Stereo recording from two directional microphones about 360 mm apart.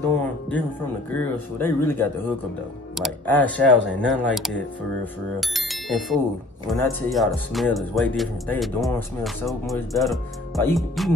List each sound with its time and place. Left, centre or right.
1.1 s speech: centre